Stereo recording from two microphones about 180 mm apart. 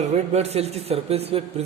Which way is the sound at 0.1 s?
40° right (ahead or behind).